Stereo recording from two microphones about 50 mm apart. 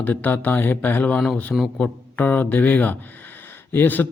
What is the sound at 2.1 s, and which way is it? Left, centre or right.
Speech, left.